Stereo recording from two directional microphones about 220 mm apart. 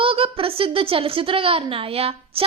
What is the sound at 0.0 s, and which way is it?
A woman's voice, 25° right (ahead or behind).